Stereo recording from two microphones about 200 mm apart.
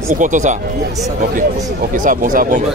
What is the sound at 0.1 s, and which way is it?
Speech, 40° right (ahead or behind).